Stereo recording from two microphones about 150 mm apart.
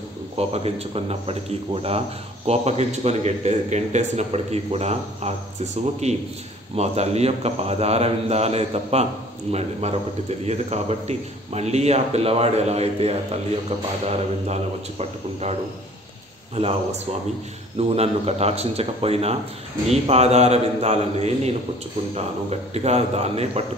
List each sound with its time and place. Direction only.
0.4 s speech: 40° right (ahead or behind)
17.7 s speech: 45° right (ahead or behind)